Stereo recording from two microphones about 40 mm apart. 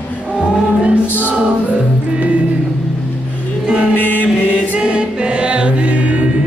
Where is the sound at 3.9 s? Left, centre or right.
Left.